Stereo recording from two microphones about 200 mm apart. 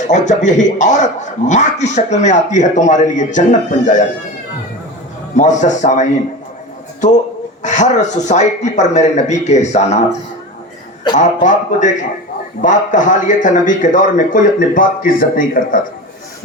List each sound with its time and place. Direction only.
0.1 s a man's voice: 35° left (ahead or behind)
5.4 s a man's voice: 35° left (ahead or behind)
7.6 s a man's voice: 35° left (ahead or behind)
11.2 s a man's voice: 40° left (ahead or behind)